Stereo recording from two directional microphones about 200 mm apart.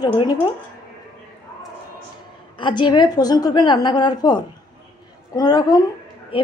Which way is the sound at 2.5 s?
25° left (ahead or behind).